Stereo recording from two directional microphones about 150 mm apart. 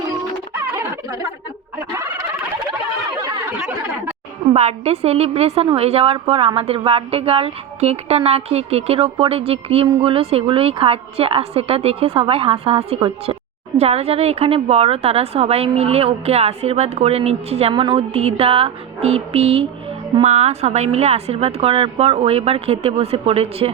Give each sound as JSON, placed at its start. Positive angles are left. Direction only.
{"t": 0.5, "sound": "music", "side_deg": -15}
{"t": 4.5, "sound": "a woman's voice", "side_deg": -45}